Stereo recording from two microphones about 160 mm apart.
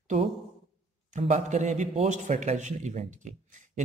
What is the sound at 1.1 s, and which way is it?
Speech, 50° right (ahead or behind).